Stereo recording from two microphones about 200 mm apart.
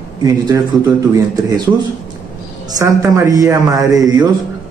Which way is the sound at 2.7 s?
15° right (ahead or behind).